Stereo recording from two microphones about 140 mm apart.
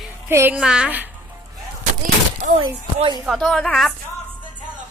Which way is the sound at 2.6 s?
40° right (ahead or behind).